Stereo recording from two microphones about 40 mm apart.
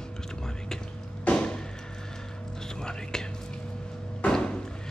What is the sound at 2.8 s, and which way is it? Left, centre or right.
Whispering, centre.